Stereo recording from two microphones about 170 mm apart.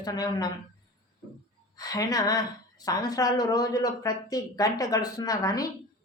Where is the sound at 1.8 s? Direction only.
20° left (ahead or behind).